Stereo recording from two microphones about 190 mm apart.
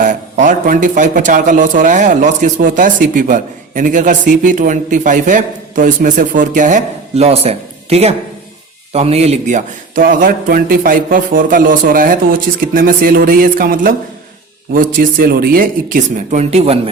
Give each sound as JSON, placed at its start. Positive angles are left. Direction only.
{"t": 0.0, "sound": "speech", "side_deg": -45}